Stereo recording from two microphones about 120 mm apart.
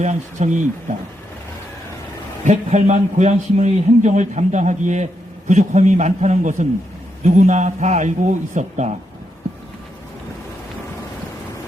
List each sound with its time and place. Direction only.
0.0 s a man's voice: 85° right
2.4 s a man's voice: 85° right